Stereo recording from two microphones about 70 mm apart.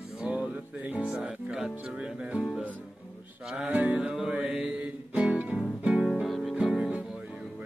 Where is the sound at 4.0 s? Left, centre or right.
Centre.